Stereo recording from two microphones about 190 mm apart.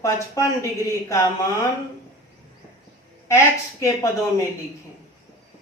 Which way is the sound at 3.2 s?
15° left (ahead or behind).